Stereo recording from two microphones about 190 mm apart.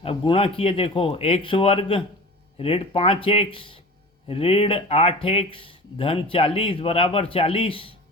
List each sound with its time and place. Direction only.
0.0 s speech: 30° left (ahead or behind)